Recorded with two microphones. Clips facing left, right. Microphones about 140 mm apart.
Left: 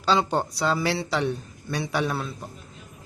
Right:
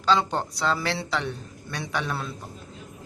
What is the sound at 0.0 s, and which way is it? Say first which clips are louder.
Speech: left 1 dB; 10° left (ahead or behind).